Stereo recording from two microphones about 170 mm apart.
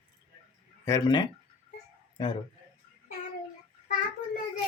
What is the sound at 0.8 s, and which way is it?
A man's voice, 20° left (ahead or behind).